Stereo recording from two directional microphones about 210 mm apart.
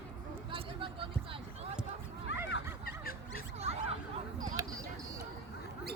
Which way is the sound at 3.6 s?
30° right (ahead or behind).